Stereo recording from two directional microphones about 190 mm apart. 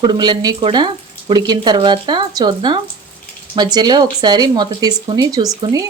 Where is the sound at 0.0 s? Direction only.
25° right (ahead or behind).